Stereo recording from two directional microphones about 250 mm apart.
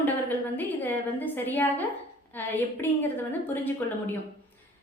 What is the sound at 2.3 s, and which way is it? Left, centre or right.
A woman's voice, centre.